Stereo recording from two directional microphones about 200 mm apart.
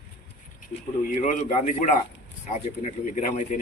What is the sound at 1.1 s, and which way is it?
Speech, 40° left (ahead or behind).